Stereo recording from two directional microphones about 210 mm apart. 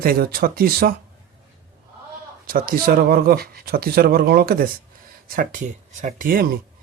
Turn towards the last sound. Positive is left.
turn(degrees=-40)  # may be behind; listen again after turning